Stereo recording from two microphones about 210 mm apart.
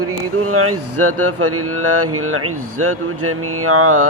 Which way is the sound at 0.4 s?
90° right.